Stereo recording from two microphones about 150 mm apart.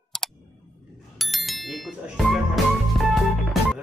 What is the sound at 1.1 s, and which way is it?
Music, centre (ahead or behind).